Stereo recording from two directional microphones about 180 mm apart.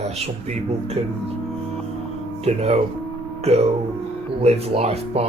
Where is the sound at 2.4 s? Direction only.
35° right (ahead or behind).